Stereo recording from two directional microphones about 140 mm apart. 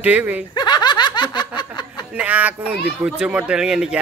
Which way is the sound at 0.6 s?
30° left (ahead or behind).